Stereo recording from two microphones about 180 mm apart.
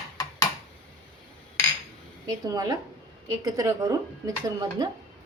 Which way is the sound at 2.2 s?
20° right (ahead or behind).